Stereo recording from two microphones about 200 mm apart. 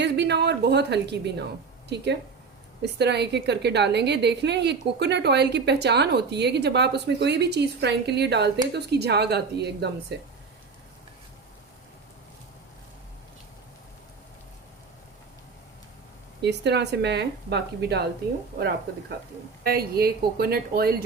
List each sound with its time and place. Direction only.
0.0 s a woman's voice: 60° right (ahead or behind)
16.4 s a woman's voice: 60° right (ahead or behind)
19.6 s a woman's voice: 50° right (ahead or behind)